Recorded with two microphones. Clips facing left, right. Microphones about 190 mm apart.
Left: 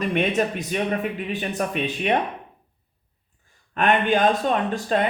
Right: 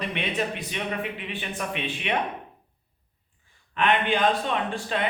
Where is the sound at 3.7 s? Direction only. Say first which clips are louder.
Left 4 dB; 45° left (ahead or behind).